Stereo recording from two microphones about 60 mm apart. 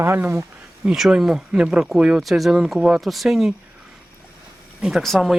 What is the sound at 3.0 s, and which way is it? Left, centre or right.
Speech, centre.